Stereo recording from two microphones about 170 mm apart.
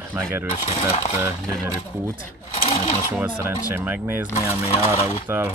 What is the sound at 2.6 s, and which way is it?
Sewing machine, 35° left (ahead or behind).